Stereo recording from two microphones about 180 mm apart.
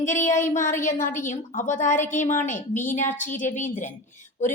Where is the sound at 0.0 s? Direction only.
45° left (ahead or behind).